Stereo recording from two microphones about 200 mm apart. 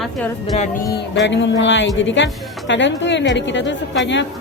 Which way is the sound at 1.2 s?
65° left (ahead or behind).